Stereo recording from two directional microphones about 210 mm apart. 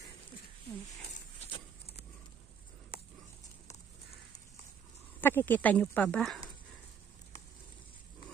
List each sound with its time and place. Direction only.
1.5 s vehicle: 30° left (ahead or behind)
5.2 s speech: 10° left (ahead or behind)